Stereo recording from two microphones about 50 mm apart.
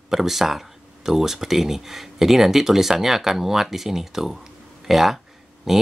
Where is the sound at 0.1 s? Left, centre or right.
Centre.